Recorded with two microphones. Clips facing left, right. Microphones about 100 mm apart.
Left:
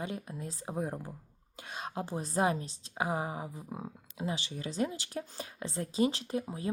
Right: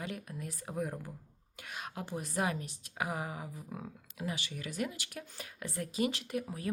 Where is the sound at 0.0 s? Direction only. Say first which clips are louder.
Left 3 dB; 25° left (ahead or behind).